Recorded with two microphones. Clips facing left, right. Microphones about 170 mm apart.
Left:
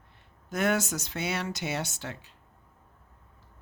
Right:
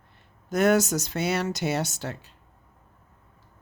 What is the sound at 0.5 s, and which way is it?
Speech, 40° right (ahead or behind).